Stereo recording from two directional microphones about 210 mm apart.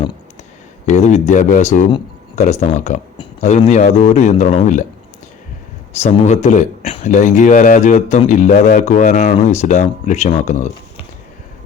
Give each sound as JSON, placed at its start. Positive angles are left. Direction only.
{"t": 0.9, "sound": "speech", "side_deg": 30}
{"t": 6.0, "sound": "speech", "side_deg": 35}